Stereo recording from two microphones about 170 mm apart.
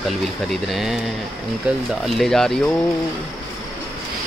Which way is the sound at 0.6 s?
Centre (ahead or behind).